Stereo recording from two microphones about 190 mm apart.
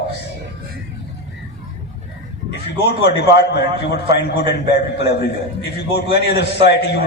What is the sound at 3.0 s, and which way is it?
A man's voice, 65° left (ahead or behind).